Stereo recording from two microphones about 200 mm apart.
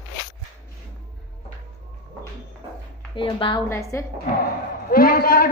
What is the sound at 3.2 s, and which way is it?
Speech, 25° left (ahead or behind).